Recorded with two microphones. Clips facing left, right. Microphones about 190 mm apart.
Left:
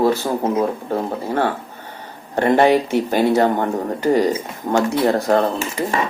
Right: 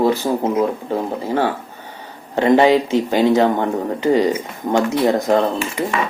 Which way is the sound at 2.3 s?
15° right (ahead or behind).